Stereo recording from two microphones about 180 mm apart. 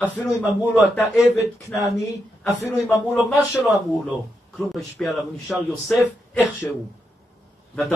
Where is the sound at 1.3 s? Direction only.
15° left (ahead or behind).